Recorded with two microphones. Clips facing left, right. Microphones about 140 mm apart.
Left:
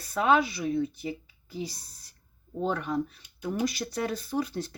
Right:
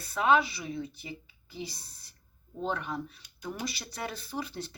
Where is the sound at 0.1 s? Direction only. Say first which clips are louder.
Left 2 dB; 45° left (ahead or behind).